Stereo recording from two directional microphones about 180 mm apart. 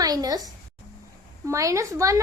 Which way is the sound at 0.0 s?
20° right (ahead or behind).